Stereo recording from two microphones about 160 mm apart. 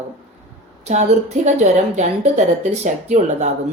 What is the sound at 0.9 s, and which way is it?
Speech, 45° right (ahead or behind).